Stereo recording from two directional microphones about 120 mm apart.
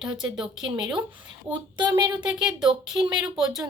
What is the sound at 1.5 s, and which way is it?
Speech, 35° right (ahead or behind).